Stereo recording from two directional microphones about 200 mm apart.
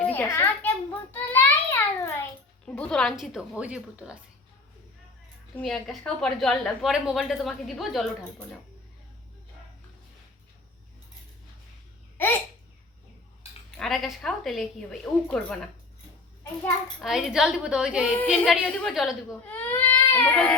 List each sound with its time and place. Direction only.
0.1 s a child's voice: 10° left (ahead or behind)
1.1 s a sound: 10° left (ahead or behind)
2.6 s a woman's voice: 5° left (ahead or behind)
5.5 s a woman's voice: centre (ahead or behind)
12.1 s babbling: 10° left (ahead or behind)
13.7 s a woman's voice: centre (ahead or behind)
17.0 s a woman's voice: centre (ahead or behind)